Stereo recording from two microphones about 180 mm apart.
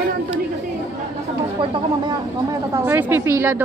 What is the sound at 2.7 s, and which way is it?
Speech, 10° right (ahead or behind).